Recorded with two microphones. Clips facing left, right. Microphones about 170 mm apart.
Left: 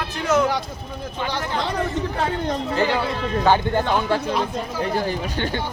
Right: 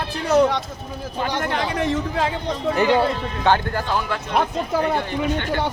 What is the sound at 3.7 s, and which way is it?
Speech, 30° left (ahead or behind).